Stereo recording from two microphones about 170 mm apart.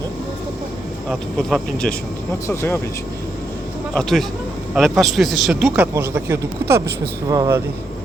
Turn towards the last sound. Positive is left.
turn(degrees=-20)  # may be behind; listen again after turning